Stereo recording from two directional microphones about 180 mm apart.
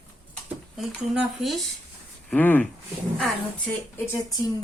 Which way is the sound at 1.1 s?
Centre (ahead or behind).